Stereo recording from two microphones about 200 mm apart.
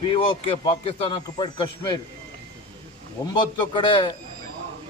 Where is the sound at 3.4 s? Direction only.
25° left (ahead or behind).